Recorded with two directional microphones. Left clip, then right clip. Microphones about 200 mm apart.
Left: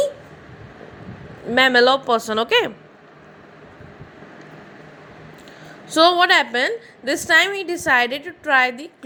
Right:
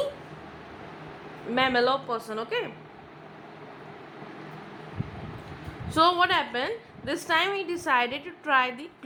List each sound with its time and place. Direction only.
1.5 s a woman's voice: 25° left (ahead or behind)
5.9 s a woman's voice: 25° left (ahead or behind)